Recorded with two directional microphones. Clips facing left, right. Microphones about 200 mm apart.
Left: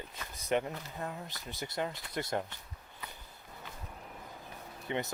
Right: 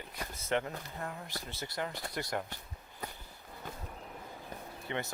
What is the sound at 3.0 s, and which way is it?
Walk, 45° right (ahead or behind).